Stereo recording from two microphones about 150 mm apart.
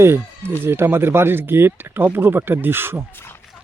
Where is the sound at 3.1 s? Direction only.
15° left (ahead or behind).